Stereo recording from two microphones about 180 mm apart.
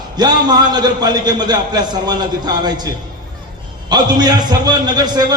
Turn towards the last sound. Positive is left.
turn(degrees=-25)  # may be behind; listen again after turning